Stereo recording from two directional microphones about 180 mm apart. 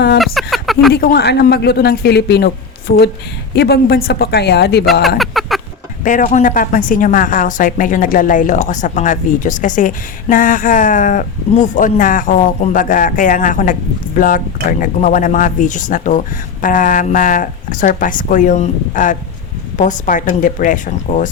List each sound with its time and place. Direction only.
0.2 s a sound: centre (ahead or behind)
0.9 s a man's voice: 65° left (ahead or behind)
5.0 s speech: centre (ahead or behind)
6.1 s a woman's voice: 45° left (ahead or behind)